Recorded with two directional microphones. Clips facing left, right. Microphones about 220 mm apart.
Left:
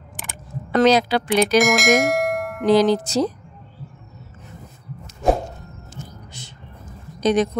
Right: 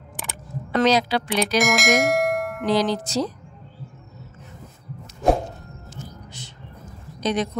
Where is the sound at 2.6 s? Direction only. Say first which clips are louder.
Left 7 dB; 50° left (ahead or behind).